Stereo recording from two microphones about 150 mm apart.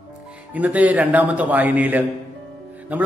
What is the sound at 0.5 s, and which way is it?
A man's voice, 10° right (ahead or behind).